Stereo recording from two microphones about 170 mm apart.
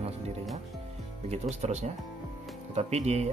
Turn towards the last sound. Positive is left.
turn(degrees=-40)  # may be behind; listen again after turning